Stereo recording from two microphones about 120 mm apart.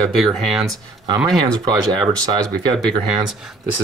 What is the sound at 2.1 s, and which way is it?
Speech, 30° right (ahead or behind).